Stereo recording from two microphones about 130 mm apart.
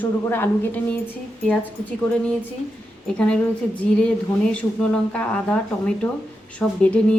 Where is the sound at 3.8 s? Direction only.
10° left (ahead or behind).